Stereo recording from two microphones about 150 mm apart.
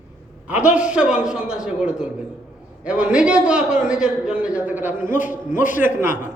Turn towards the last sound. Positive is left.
turn(degrees=-15)  # may be behind; listen again after turning